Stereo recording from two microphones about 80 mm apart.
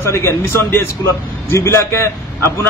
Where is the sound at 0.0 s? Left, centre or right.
Left.